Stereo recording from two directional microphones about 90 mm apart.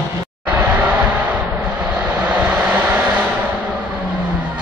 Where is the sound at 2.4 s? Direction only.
15° right (ahead or behind).